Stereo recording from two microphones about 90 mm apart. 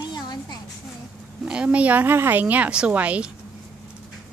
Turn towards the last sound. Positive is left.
turn(degrees=-15)  # may be behind; listen again after turning